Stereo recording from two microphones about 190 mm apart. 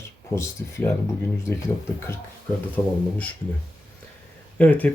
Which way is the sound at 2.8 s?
20° left (ahead or behind).